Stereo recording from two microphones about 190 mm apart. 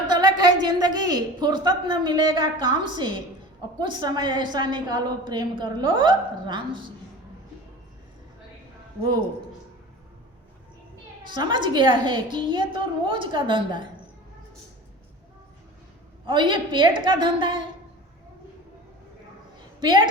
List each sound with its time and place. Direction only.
0.1 s a woman's voice: 20° right (ahead or behind)
9.0 s a woman's voice: 20° right (ahead or behind)
11.3 s a woman's voice: 25° right (ahead or behind)
16.2 s a woman's voice: 25° right (ahead or behind)
19.8 s a woman's voice: 25° right (ahead or behind)